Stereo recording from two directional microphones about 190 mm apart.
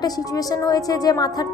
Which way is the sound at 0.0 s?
20° left (ahead or behind).